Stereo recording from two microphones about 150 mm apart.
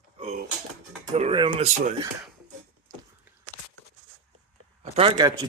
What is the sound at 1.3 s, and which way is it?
Speech, 30° right (ahead or behind).